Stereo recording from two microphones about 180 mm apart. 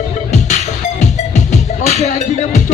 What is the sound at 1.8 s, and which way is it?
Music, 40° left (ahead or behind).